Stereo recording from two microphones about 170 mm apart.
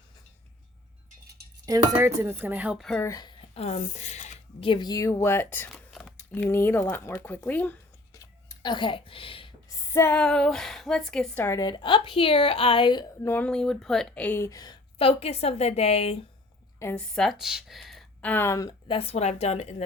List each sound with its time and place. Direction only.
1.6 s speech: 20° right (ahead or behind); by 3.0 s centre (ahead or behind)
3.0 s a woman's voice: 20° left (ahead or behind)
3.5 s speech: 40° left (ahead or behind)
4.7 s speech: 25° left (ahead or behind)
9.6 s a woman's voice: 15° left (ahead or behind)
13.2 s a woman's voice: 10° left (ahead or behind); by 16.1 s 35° left (ahead or behind)
16.8 s speech: 5° left (ahead or behind)
18.9 s a woman's voice: 35° left (ahead or behind)